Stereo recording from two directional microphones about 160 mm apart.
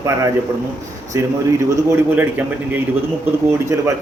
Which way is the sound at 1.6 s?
15° right (ahead or behind).